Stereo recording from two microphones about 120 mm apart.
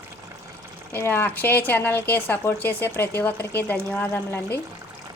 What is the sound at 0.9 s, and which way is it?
Speech, 20° left (ahead or behind).